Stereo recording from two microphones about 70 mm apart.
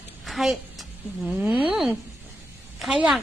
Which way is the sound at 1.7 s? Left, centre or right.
Centre.